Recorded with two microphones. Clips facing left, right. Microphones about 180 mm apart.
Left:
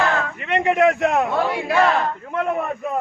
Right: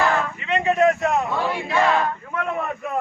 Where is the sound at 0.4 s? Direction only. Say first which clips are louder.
Left 2 dB; 65° left (ahead or behind).